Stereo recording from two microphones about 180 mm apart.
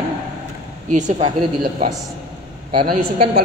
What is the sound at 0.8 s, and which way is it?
A woman's voice, 40° right (ahead or behind).